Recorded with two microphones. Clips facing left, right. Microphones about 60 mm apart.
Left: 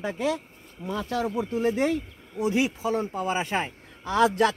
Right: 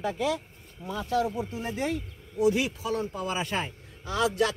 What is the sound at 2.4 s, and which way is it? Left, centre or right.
Speech, left.